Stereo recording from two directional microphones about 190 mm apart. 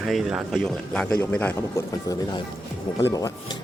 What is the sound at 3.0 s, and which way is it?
Speech, 15° left (ahead or behind).